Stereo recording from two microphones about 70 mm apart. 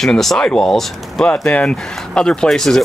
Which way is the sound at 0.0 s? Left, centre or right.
Centre.